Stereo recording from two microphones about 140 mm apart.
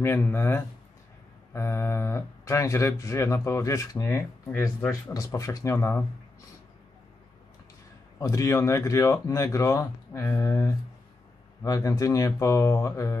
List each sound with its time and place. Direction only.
0.0 s speech: 15° left (ahead or behind)
8.2 s speech: 25° left (ahead or behind)